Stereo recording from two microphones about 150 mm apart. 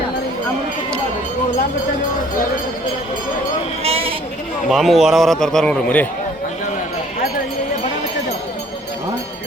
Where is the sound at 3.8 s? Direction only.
40° right (ahead or behind).